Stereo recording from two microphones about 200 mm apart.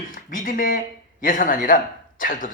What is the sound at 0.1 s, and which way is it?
Speech, 45° left (ahead or behind).